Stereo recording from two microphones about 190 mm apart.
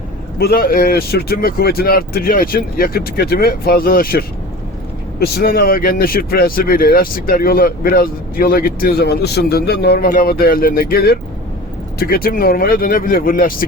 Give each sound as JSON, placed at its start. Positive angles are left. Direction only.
{"t": 0.3, "sound": "speech", "side_deg": 55}